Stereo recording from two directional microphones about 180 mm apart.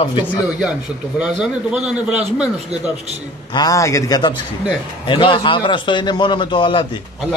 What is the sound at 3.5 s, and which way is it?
A man's voice, 20° left (ahead or behind).